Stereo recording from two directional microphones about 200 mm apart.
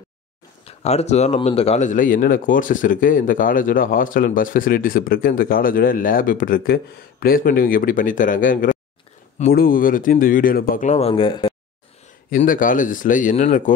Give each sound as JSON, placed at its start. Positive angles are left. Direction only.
{"t": 0.7, "sound": "speech", "side_deg": 30}
{"t": 12.3, "sound": "speech", "side_deg": 45}